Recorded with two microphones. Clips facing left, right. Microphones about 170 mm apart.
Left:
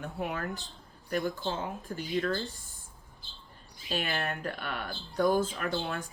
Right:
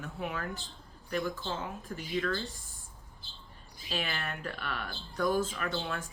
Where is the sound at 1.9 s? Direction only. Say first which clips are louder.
Left 3 dB; 40° left (ahead or behind).